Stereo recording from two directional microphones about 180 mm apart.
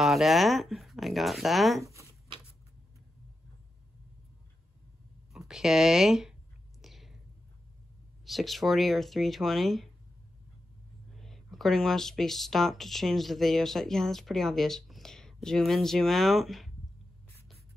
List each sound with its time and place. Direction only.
0.0 s speech: centre (ahead or behind)
1.9 s a sound: 15° right (ahead or behind)
5.3 s speech: centre (ahead or behind)
6.8 s whispering: centre (ahead or behind)
8.3 s speech: centre (ahead or behind)
11.1 s speech: centre (ahead or behind)